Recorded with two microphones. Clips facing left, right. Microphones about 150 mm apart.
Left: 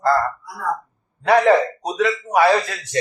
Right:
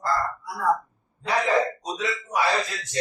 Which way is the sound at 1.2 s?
65° left (ahead or behind).